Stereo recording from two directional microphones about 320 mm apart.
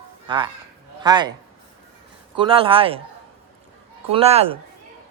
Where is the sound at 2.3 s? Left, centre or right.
Centre.